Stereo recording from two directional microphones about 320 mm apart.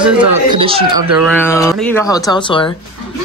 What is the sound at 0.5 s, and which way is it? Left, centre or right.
Speech, centre.